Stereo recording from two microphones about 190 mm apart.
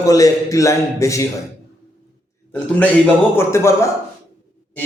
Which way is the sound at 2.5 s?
10° left (ahead or behind).